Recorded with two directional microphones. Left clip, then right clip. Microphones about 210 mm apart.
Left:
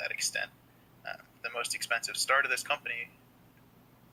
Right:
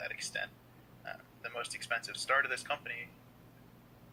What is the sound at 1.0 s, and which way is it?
Speech, 10° left (ahead or behind).